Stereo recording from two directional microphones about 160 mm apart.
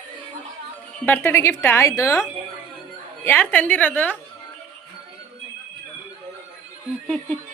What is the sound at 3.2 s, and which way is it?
Speech, 10° left (ahead or behind).